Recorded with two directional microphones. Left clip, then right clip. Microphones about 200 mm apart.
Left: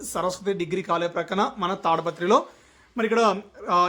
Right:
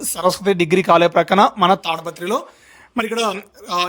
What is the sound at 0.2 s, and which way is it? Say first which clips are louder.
Speech: right 9 dB; 45° right (ahead or behind).